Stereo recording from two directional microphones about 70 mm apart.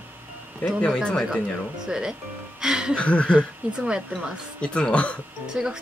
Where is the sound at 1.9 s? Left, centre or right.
Centre.